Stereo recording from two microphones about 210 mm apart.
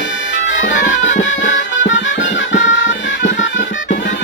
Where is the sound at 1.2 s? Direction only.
60° left (ahead or behind).